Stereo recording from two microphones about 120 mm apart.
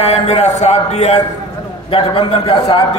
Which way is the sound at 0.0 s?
65° left (ahead or behind).